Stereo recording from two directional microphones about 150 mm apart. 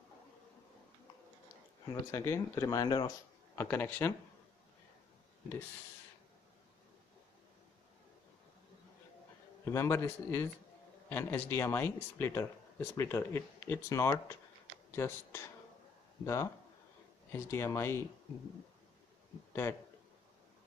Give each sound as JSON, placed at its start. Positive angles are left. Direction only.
{"t": 1.9, "sound": "speech", "side_deg": 20}
{"t": 3.5, "sound": "speech", "side_deg": 15}
{"t": 9.7, "sound": "speech", "side_deg": 20}